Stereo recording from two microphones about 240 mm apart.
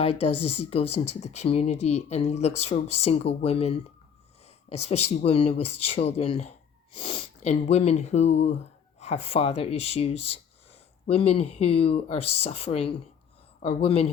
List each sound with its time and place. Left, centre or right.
0.0 s speech: left